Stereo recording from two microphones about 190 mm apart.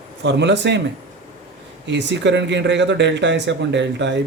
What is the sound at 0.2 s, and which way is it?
Speech, 65° right (ahead or behind).